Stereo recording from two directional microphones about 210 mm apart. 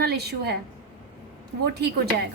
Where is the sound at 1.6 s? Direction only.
50° right (ahead or behind).